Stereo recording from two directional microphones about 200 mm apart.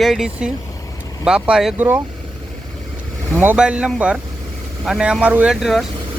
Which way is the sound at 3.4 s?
5° right (ahead or behind).